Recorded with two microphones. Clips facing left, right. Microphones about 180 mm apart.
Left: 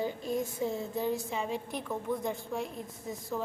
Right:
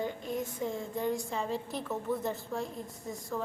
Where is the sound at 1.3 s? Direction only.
15° left (ahead or behind).